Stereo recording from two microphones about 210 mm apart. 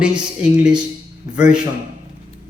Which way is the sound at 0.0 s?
5° right (ahead or behind).